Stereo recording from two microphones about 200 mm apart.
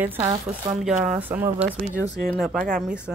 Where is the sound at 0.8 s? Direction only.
5° right (ahead or behind).